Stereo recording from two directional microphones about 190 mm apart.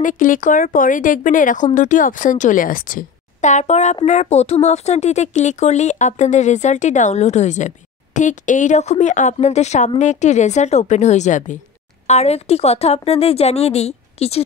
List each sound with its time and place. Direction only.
0.0 s speech: 45° left (ahead or behind)